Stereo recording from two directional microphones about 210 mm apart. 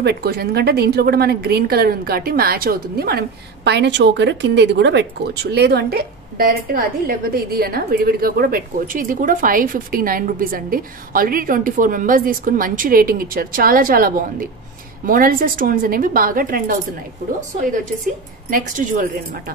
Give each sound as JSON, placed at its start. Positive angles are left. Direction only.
{"t": 0.0, "sound": "a woman's voice", "side_deg": -50}
{"t": 18.5, "sound": "speech", "side_deg": -40}